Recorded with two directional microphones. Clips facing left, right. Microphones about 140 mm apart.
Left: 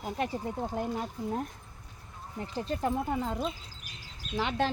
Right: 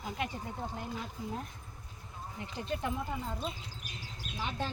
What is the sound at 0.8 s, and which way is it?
Speech, 50° left (ahead or behind).